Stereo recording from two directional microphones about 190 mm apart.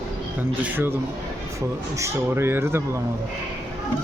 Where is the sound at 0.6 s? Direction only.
10° right (ahead or behind).